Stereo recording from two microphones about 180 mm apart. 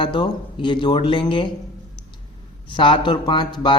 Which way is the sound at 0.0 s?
25° left (ahead or behind).